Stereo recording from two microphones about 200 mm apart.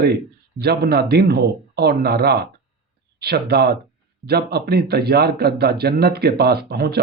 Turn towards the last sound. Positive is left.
turn(degrees=-55)  # may be behind; listen again after turning